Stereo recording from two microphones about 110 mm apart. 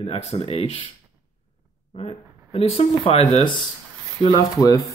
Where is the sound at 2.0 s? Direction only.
60° left (ahead or behind).